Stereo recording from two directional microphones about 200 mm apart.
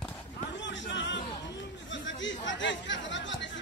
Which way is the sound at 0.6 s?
65° left (ahead or behind).